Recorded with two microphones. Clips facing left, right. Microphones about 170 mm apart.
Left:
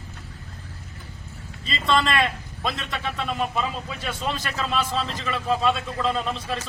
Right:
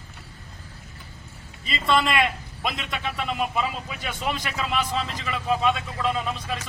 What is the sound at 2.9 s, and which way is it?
A man's voice, 5° right (ahead or behind).